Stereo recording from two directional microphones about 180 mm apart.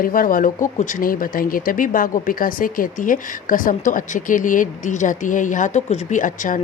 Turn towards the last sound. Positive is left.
turn(degrees=45)  # may be behind; listen again after turning